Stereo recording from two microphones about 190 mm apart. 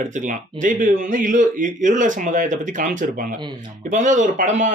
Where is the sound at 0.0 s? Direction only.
40° right (ahead or behind).